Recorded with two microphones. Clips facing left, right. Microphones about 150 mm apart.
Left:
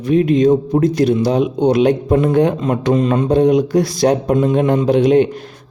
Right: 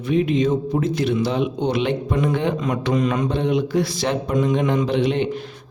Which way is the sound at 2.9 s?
30° left (ahead or behind).